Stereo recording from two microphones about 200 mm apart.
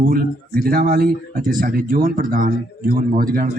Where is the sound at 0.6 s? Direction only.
45° right (ahead or behind).